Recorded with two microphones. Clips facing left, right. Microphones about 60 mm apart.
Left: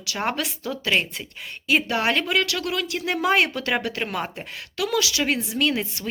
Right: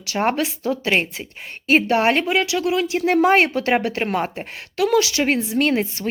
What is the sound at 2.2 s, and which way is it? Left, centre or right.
Speech, right.